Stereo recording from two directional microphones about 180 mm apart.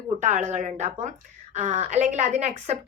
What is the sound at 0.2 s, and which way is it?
A woman's voice, 40° right (ahead or behind).